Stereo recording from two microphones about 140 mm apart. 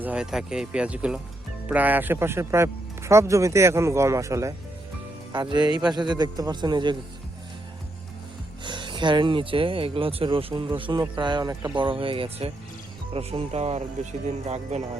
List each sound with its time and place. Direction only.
0.0 s speech: 5° right (ahead or behind); by 6.9 s 35° right (ahead or behind)
8.6 s speech: 35° right (ahead or behind); by 14.8 s 50° right (ahead or behind)